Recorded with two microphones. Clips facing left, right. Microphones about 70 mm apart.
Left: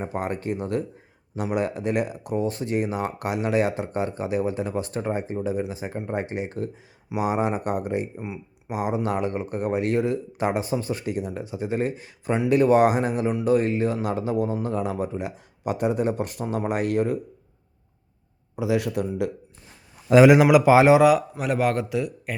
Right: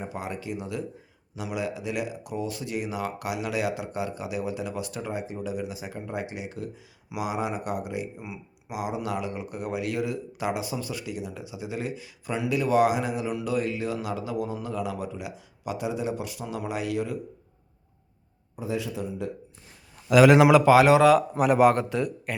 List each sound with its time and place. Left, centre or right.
0.0 s speech: left
8.2 s speech: left
8.7 s speech: left
18.5 s a man's voice: left
20.1 s a man's voice: left
20.3 s a man's voice: centre
21.3 s speech: centre